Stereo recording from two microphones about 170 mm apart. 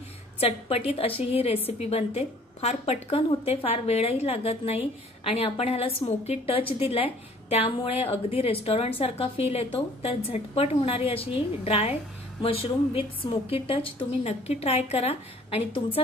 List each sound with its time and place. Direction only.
0.4 s a woman's voice: 35° left (ahead or behind)